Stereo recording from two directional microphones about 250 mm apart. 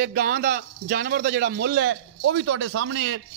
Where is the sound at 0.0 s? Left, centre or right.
Right.